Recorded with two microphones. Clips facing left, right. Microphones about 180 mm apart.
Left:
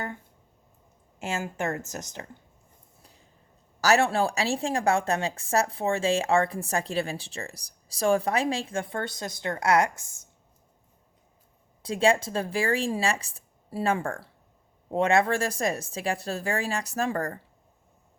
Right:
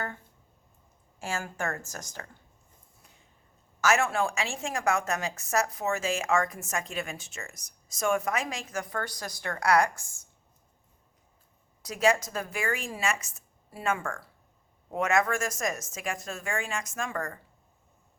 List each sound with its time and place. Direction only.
1.2 s speech: 20° left (ahead or behind)
3.8 s a woman's voice: 35° left (ahead or behind)
11.8 s a woman's voice: 30° left (ahead or behind)